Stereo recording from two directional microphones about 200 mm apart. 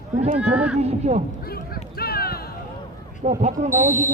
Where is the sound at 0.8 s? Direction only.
35° right (ahead or behind).